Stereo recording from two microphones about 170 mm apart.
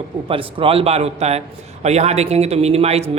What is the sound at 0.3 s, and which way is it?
Speech, 30° right (ahead or behind).